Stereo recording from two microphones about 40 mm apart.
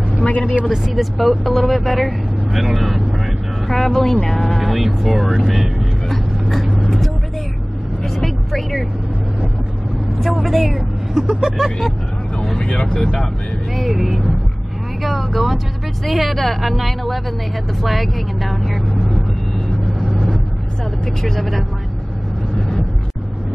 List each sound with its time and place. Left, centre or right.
0.2 s a woman's voice: left
0.7 s speech: centre
3.6 s speech: centre
4.6 s speech: centre
6.4 s vehicle: centre
8.0 s vehicle: centre
10.4 s speech: centre
12.6 s speech: left
13.7 s speech: centre
21.2 s speech: centre